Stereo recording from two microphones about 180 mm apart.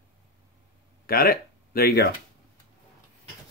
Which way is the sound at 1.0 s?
55° left (ahead or behind).